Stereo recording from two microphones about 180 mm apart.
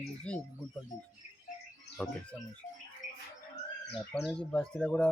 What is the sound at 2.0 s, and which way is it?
Speech, 5° left (ahead or behind).